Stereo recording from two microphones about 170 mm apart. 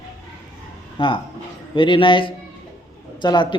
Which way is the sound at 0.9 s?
30° left (ahead or behind).